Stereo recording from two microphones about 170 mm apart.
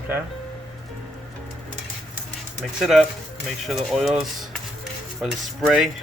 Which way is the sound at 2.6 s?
Centre (ahead or behind).